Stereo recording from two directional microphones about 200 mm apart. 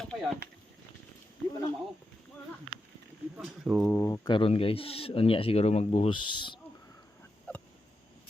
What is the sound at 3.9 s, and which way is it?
Speech, 15° left (ahead or behind).